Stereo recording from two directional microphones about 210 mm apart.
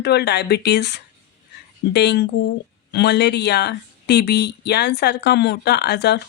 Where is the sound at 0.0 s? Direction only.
50° left (ahead or behind).